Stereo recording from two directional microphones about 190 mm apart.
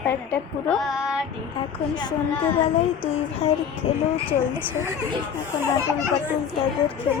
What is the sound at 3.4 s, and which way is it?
Speech, 30° left (ahead or behind).